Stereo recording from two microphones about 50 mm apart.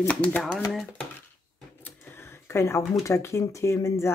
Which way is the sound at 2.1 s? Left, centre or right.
Left.